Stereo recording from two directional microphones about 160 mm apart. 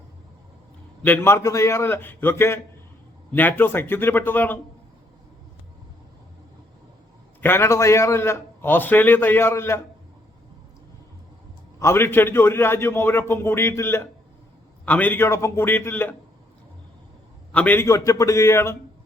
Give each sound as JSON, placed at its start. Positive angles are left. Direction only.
{"t": 1.0, "sound": "a man's voice", "side_deg": 15}
{"t": 7.4, "sound": "a man's voice", "side_deg": 15}
{"t": 11.8, "sound": "a man's voice", "side_deg": 15}
{"t": 17.5, "sound": "a man's voice", "side_deg": 10}